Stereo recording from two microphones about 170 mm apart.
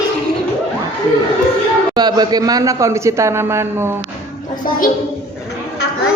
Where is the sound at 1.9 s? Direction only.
25° right (ahead or behind).